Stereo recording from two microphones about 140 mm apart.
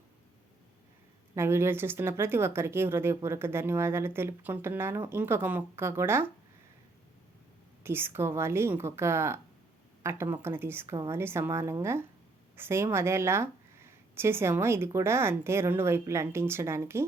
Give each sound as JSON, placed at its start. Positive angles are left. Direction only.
{"t": 1.4, "sound": "speech", "side_deg": -20}
{"t": 7.9, "sound": "speech", "side_deg": -15}